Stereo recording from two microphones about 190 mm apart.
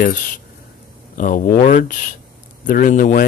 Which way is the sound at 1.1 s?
45° left (ahead or behind).